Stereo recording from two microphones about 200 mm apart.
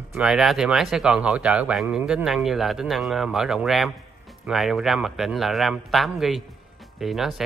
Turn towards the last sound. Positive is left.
turn(degrees=0)  # may be behind; listen again after turning